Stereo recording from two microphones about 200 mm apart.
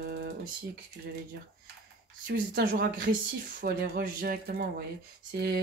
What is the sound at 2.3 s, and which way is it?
Speech, 45° right (ahead or behind).